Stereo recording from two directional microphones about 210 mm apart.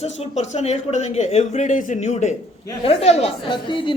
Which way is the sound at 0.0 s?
30° left (ahead or behind).